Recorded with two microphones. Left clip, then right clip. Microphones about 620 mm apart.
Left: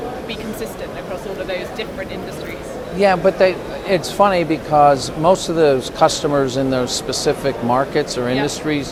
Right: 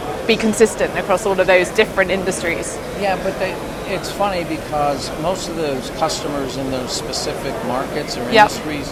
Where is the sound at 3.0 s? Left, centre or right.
Left.